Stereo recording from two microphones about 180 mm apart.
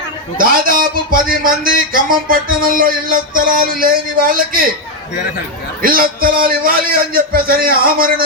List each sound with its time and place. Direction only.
0.3 s a man's voice: 50° right (ahead or behind)
5.8 s a man's voice: 55° right (ahead or behind)